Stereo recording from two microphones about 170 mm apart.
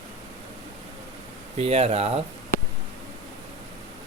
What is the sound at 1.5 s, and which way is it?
Speech, 35° right (ahead or behind).